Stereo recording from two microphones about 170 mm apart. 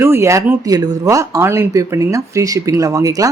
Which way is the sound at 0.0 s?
15° right (ahead or behind).